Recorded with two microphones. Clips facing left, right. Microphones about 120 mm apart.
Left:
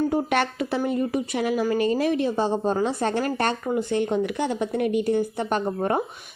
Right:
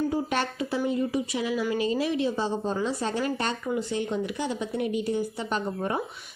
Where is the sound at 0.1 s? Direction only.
65° left (ahead or behind).